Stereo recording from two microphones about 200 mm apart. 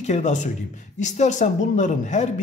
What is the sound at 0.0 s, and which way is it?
Speech, 35° left (ahead or behind).